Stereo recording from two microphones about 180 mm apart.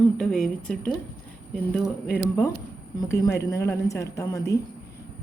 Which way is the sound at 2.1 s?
10° left (ahead or behind).